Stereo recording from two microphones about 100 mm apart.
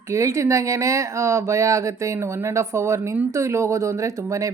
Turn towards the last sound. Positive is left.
turn(degrees=-30)  # may be behind; listen again after turning